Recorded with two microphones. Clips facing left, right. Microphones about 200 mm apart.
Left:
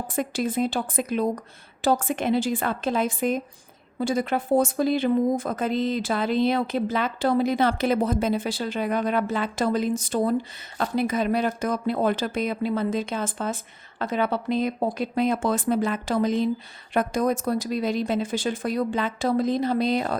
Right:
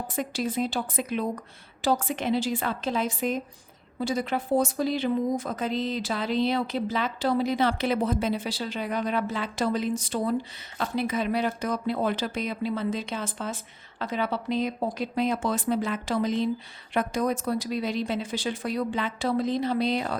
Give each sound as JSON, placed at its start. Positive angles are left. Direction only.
{"t": 0.2, "sound": "speech", "side_deg": 50}